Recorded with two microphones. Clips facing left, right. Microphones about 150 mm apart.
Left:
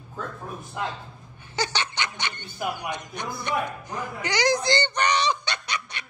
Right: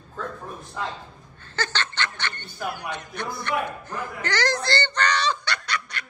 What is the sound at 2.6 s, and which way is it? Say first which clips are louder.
Speech: left 1 dB; 15° left (ahead or behind).